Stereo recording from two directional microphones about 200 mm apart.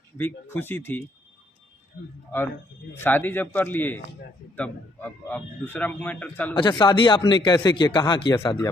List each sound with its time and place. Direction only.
0.2 s a man's voice: 10° left (ahead or behind)
2.9 s a man's voice: 10° left (ahead or behind)
6.6 s speech: 20° left (ahead or behind)